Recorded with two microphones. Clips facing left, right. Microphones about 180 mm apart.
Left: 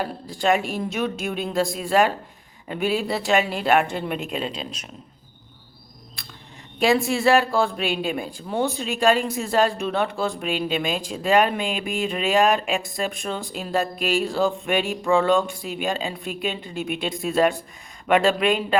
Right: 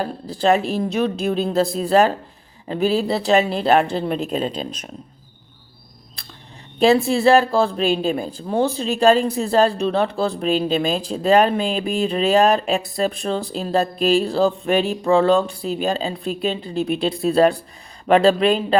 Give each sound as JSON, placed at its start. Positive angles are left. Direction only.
{"t": 0.0, "sound": "speech", "side_deg": -35}
{"t": 6.7, "sound": "a woman's voice", "side_deg": -35}